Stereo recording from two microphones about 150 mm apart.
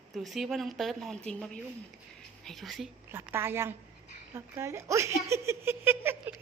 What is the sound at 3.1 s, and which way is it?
A woman's voice, 15° right (ahead or behind).